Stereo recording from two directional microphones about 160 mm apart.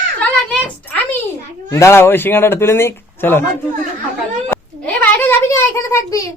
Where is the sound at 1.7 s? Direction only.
15° left (ahead or behind).